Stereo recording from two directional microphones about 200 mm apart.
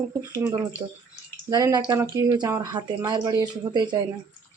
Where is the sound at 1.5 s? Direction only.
15° right (ahead or behind).